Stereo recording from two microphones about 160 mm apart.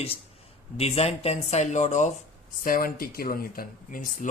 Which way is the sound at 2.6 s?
65° left (ahead or behind).